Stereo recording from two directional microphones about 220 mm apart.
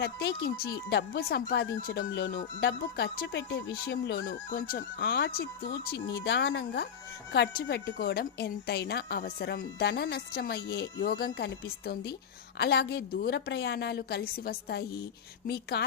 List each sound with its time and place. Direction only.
0.0 s speech: 50° left (ahead or behind)